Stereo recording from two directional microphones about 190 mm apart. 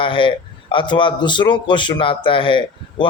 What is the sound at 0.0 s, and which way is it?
A man's voice, 25° left (ahead or behind).